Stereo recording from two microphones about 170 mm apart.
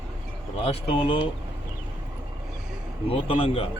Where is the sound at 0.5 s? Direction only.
35° left (ahead or behind).